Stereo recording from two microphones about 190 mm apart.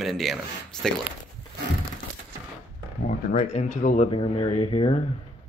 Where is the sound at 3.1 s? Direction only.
40° left (ahead or behind).